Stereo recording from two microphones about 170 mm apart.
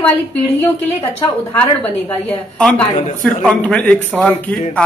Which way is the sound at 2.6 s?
5° left (ahead or behind).